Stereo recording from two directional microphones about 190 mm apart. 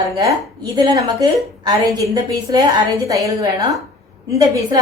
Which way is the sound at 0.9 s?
20° right (ahead or behind).